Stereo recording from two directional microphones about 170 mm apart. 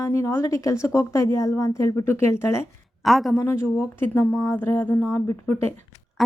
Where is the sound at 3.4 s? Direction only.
15° left (ahead or behind).